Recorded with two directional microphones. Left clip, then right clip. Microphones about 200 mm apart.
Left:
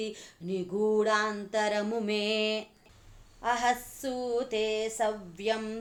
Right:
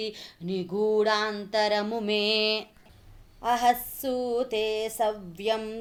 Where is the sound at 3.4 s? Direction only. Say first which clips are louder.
Right 4 dB; 35° right (ahead or behind).